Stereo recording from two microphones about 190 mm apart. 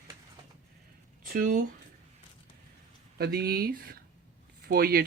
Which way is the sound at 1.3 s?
50° right (ahead or behind).